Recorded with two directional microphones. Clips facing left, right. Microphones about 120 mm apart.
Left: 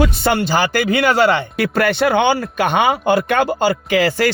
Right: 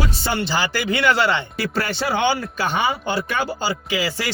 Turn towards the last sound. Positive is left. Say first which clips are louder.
# left 8 dB
turn(degrees=55)  # may be behind; listen again after turning